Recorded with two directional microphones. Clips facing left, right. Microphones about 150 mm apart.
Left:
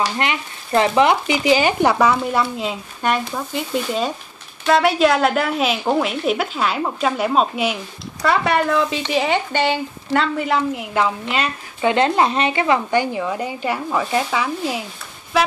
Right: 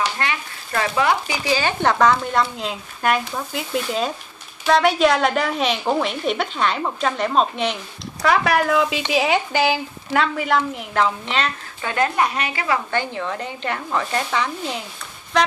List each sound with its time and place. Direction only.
0.2 s a woman's voice: 20° left (ahead or behind); by 11.5 s 5° left (ahead or behind)
11.8 s speech: 25° left (ahead or behind)
13.0 s a woman's voice: 10° left (ahead or behind)